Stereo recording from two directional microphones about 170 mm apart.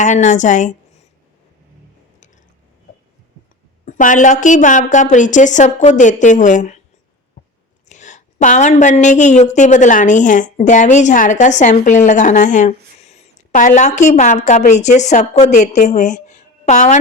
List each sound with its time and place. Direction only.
0.0 s a woman's voice: 45° left (ahead or behind)
3.8 s a woman's voice: 50° left (ahead or behind)
7.9 s a woman's voice: 45° left (ahead or behind)